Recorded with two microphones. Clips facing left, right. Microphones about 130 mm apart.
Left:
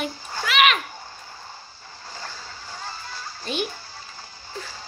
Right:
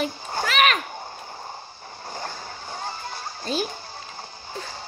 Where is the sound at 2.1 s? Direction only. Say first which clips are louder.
Right 5 dB; 50° right (ahead or behind).